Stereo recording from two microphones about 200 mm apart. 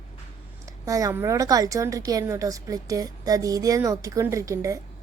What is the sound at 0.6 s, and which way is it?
A woman's voice, 15° right (ahead or behind).